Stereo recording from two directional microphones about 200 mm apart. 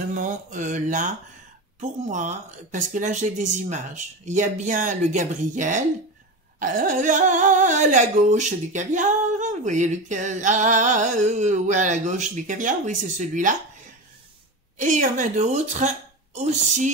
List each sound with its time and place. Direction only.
0.1 s speech: 40° right (ahead or behind)
14.8 s speech: 40° right (ahead or behind)